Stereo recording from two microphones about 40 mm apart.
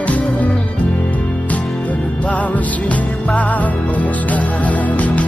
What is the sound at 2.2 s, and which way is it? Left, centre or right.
Music, left.